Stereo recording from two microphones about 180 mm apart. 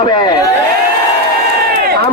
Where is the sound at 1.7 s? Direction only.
55° right (ahead or behind).